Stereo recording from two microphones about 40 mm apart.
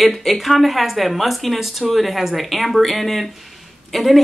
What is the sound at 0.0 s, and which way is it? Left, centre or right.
A woman's voice, centre.